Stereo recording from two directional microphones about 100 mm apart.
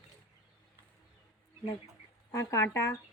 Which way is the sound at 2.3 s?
30° left (ahead or behind).